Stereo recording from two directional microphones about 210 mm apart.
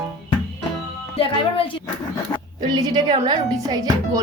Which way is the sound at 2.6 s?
20° right (ahead or behind).